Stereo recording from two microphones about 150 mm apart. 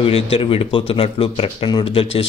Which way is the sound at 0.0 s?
40° left (ahead or behind).